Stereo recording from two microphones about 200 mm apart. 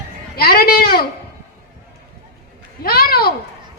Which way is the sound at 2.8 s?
50° left (ahead or behind).